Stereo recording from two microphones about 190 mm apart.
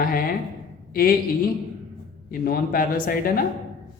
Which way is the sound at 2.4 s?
50° left (ahead or behind).